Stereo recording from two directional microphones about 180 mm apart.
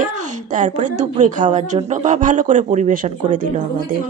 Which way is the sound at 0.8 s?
45° right (ahead or behind).